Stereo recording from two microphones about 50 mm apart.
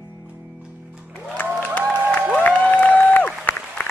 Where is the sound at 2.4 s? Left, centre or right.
Left.